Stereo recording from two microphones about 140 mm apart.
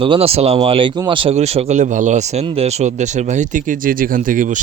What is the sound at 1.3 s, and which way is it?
Speech, 50° right (ahead or behind).